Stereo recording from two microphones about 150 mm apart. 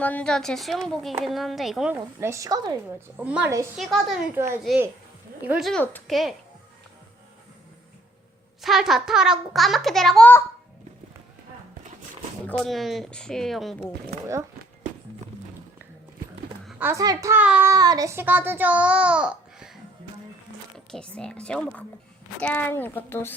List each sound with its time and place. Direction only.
0.0 s a child's voice: 10° left (ahead or behind)
2.0 s a woman's voice: 20° right (ahead or behind)
3.2 s a child's voice: 10° right (ahead or behind)
3.8 s a child's voice: centre (ahead or behind)
5.5 s a child's voice: centre (ahead or behind)
8.6 s a child's voice: centre (ahead or behind)
12.5 s a child's voice: centre (ahead or behind)
16.8 s a woman's voice: 20° right (ahead or behind)
17.4 s a child's voice: 10° right (ahead or behind)
17.7 s a child's voice: 25° right (ahead or behind); by 23.3 s 15° left (ahead or behind)